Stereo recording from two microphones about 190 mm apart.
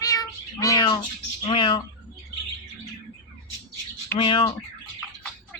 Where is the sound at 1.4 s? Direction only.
25° left (ahead or behind).